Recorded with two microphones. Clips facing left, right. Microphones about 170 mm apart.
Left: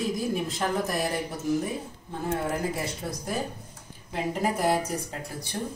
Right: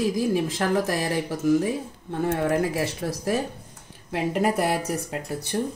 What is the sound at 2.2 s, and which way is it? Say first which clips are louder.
Speech: right 5 dB; 75° right (ahead or behind).